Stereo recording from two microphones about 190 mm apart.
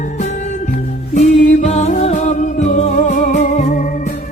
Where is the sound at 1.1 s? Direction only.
40° left (ahead or behind).